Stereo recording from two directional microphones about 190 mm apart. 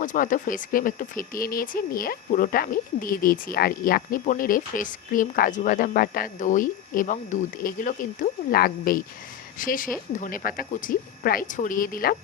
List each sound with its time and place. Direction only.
0.0 s speech: 45° left (ahead or behind)